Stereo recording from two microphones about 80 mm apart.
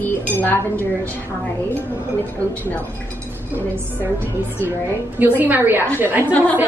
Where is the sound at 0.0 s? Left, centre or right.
Left.